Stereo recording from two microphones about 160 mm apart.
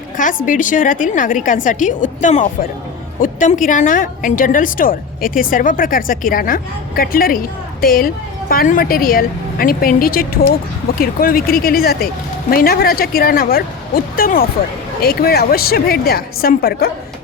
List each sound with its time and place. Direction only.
0.2 s a woman's voice: 55° left (ahead or behind)